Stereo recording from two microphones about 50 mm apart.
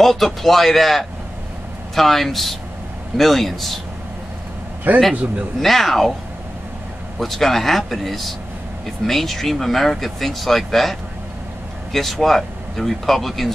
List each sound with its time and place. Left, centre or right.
0.0 s speech: centre
5.1 s a man's voice: right
5.6 s speech: centre
7.2 s speech: centre